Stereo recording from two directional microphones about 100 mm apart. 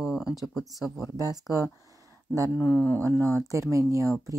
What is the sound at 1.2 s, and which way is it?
Speech, 35° right (ahead or behind).